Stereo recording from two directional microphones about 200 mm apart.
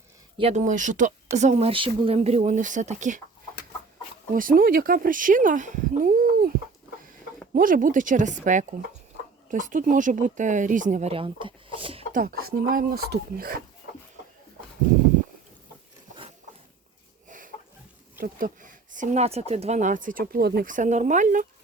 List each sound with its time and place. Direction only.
0.3 s speech: 30° right (ahead or behind)
4.4 s speech: 45° right (ahead or behind)
7.5 s speech: 45° right (ahead or behind); by 12.0 s 25° right (ahead or behind)
12.1 s speech: 45° right (ahead or behind)
17.2 s a sound: 40° right (ahead or behind)
18.2 s speech: 45° right (ahead or behind)